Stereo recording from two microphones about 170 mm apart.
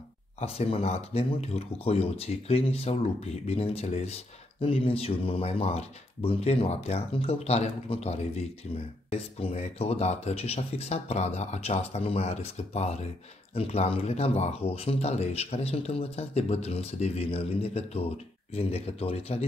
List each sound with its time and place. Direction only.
0.4 s speech: 35° left (ahead or behind)